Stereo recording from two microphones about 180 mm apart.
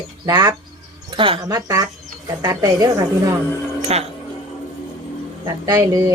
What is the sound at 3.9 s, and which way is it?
Speech, 35° right (ahead or behind).